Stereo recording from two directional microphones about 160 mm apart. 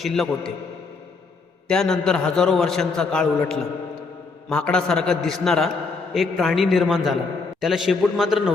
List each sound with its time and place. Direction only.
0.0 s a man's voice: centre (ahead or behind)
1.6 s a man's voice: 5° left (ahead or behind)